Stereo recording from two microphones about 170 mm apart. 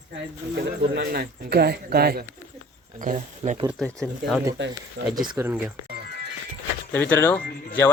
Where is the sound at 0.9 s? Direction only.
70° right (ahead or behind).